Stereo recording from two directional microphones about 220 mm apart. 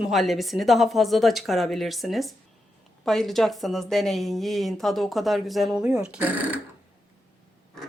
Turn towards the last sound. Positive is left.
turn(degrees=-5)  # may be behind; listen again after turning